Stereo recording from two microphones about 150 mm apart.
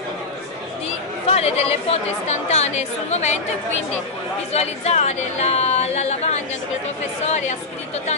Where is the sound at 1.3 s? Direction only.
45° left (ahead or behind).